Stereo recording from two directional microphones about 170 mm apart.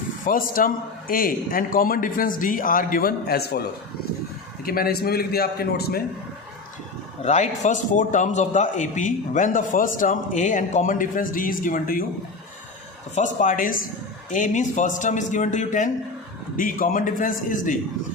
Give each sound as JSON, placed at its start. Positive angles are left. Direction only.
{"t": 0.3, "sound": "a man's voice", "side_deg": 55}
{"t": 4.6, "sound": "a man's voice", "side_deg": 60}
{"t": 7.2, "sound": "a man's voice", "side_deg": 45}
{"t": 13.1, "sound": "a man's voice", "side_deg": 50}